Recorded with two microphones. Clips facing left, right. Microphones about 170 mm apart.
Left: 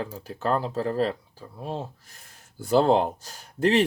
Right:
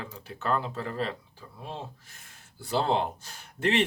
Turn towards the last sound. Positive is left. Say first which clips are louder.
# left 5 dB
turn(degrees=40)  # may be behind; listen again after turning